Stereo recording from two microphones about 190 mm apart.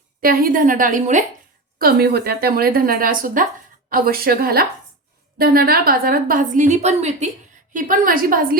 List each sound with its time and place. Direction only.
0.2 s a woman's voice: 50° right (ahead or behind)
1.8 s a woman's voice: 55° right (ahead or behind)